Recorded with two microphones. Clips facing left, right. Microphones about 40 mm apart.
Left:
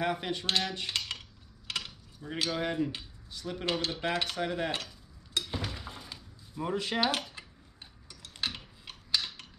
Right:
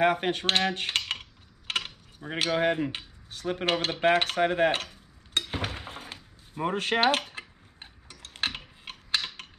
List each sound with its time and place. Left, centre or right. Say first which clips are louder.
0.0 s cutlery: right 7 dB; right
1.7 s typing: right 6 dB; right
3.3 s cutlery: right 5 dB; right
5.5 s thunk: right 4 dB; right